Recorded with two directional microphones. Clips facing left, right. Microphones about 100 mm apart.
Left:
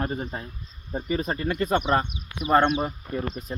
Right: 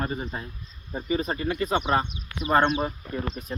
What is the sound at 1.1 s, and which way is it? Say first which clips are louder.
Speech: even; 50° left (ahead or behind).